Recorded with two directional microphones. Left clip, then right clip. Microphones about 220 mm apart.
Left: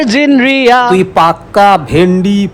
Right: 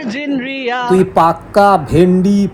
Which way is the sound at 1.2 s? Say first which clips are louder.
Left 3 dB; 10° left (ahead or behind).